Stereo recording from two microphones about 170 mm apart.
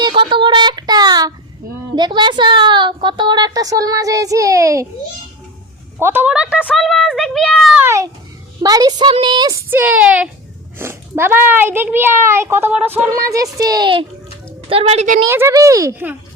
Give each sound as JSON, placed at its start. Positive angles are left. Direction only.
{"t": 0.0, "sound": "a sound", "side_deg": -30}
{"t": 2.0, "sound": "a woman's voice", "side_deg": -25}
{"t": 6.0, "sound": "a child's voice", "side_deg": -10}
{"t": 7.8, "sound": "a child's voice", "side_deg": -15}
{"t": 14.7, "sound": "a woman's voice", "side_deg": -35}
{"t": 15.3, "sound": "a child's voice", "side_deg": -15}